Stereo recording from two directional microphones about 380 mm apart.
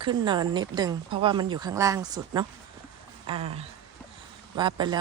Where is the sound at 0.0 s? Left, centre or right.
Centre.